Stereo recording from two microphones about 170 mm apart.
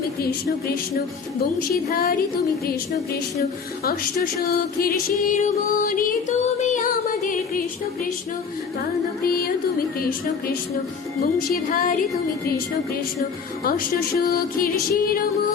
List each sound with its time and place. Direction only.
1.5 s music: 60° left (ahead or behind)
3.8 s music: 65° left (ahead or behind)
9.2 s music: 60° left (ahead or behind)
13.7 s music: 60° left (ahead or behind)